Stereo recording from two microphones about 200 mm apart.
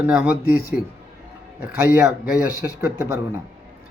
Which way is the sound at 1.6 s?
5° right (ahead or behind).